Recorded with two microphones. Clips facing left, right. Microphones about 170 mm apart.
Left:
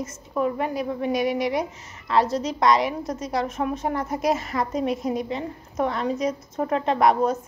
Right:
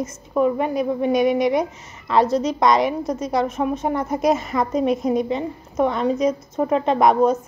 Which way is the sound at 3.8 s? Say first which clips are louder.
Right 5 dB; 25° right (ahead or behind).